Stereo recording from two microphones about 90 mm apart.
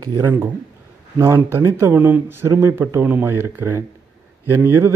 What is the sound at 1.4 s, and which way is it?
Speech, 30° right (ahead or behind).